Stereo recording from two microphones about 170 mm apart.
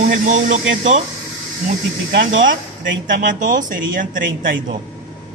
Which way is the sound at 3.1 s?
50° right (ahead or behind).